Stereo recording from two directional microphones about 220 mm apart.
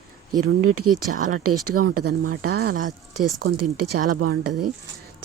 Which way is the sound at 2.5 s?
45° right (ahead or behind).